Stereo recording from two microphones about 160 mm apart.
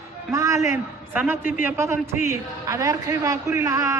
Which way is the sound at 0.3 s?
20° right (ahead or behind).